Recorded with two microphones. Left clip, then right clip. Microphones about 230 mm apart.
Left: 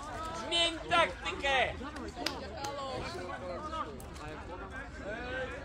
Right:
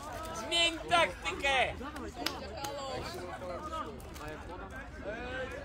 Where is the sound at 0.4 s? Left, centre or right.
Right.